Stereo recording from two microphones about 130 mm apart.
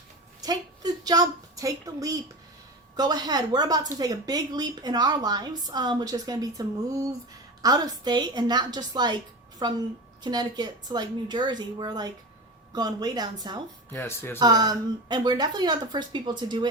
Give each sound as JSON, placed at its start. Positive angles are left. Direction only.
{"t": 0.4, "sound": "a woman's voice", "side_deg": -30}
{"t": 13.9, "sound": "speech", "side_deg": 15}
{"t": 14.3, "sound": "a woman's voice", "side_deg": -30}